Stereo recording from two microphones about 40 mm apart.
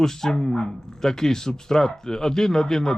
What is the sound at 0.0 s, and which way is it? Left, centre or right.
Speech, centre.